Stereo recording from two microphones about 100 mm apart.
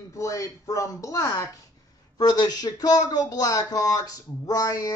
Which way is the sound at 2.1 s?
40° left (ahead or behind).